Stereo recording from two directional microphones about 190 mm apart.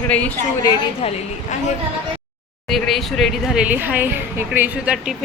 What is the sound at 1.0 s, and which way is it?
Speech, 35° left (ahead or behind).